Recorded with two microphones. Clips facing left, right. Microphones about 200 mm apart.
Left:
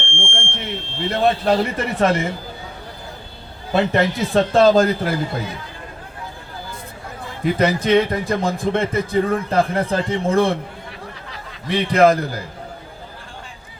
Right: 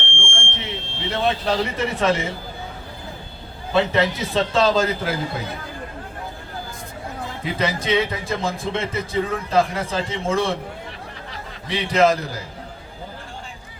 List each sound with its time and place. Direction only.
0.0 s speech: 55° left (ahead or behind)
3.7 s speech: 50° left (ahead or behind)
7.4 s a man's voice: 55° left (ahead or behind)
11.7 s a man's voice: 55° left (ahead or behind)